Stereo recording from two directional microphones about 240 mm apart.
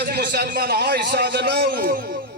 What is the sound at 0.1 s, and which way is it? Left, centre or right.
A man's voice, right.